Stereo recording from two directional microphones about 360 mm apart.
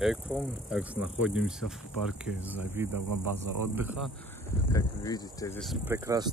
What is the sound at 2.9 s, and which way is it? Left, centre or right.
Speech, right.